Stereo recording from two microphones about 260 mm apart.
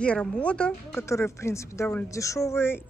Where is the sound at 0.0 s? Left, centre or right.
Centre.